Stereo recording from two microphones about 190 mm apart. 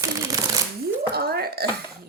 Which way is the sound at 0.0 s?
15° right (ahead or behind).